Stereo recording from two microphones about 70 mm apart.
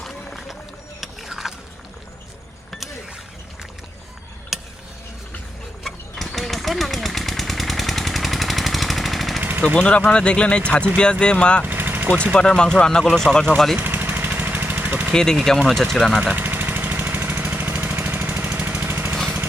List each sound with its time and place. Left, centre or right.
0.0 s run: centre
1.0 s a sound: centre
4.5 s a sound: centre
5.8 s engine: centre
9.4 s a sound: right
9.7 s speech: centre
11.6 s vehicle: right
12.1 s speech: centre
13.7 s vehicle: right
15.1 s speech: centre
16.3 s vehicle: right
19.1 s vehicle: centre